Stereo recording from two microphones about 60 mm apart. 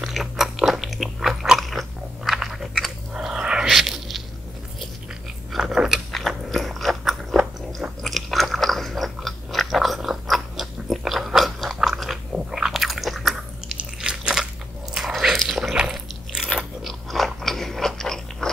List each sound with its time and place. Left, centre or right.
0.0 s biting: centre
5.6 s biting: centre
13.7 s biting: centre
15.0 s biting: centre